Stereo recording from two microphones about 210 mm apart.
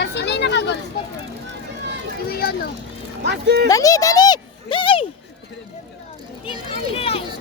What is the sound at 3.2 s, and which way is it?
Speech, 55° right (ahead or behind).